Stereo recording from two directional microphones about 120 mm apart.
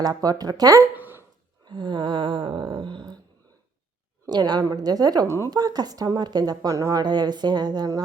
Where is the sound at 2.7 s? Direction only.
45° right (ahead or behind).